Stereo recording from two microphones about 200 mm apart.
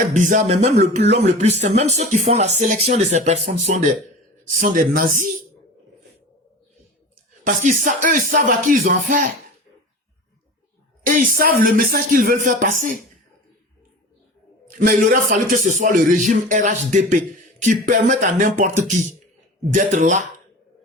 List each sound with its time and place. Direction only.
0.1 s speech: 40° right (ahead or behind)
7.4 s speech: 40° right (ahead or behind)
11.0 s speech: 45° right (ahead or behind)
14.7 s speech: 45° right (ahead or behind)